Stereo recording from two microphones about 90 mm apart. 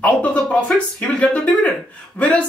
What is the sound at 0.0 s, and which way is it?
Speech, 15° left (ahead or behind).